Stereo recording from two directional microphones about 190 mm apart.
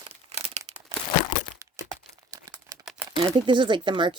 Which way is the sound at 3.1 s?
25° right (ahead or behind).